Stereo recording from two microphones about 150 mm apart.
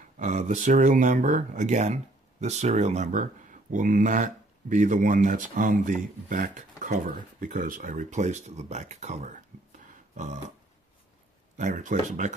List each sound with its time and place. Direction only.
0.2 s speech: 55° right (ahead or behind)
11.5 s speech: 55° right (ahead or behind)